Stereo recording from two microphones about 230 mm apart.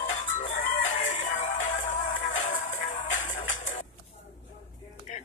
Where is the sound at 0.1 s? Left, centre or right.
Left.